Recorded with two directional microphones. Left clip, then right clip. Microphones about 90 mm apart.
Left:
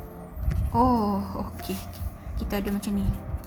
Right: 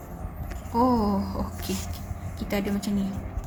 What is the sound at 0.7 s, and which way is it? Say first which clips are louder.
Speech: left 1 dB; 45° left (ahead or behind).